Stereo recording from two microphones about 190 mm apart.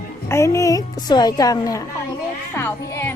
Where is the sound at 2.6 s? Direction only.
10° left (ahead or behind).